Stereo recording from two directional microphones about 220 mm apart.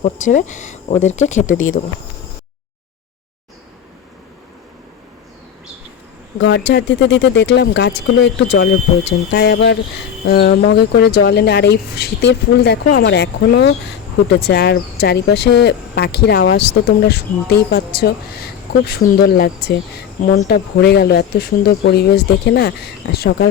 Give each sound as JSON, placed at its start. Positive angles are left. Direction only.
{"t": 0.0, "sound": "speech", "side_deg": 35}
{"t": 6.4, "sound": "speech", "side_deg": 50}